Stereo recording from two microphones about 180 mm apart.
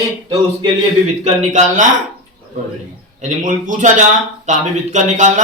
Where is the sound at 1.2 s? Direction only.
40° right (ahead or behind).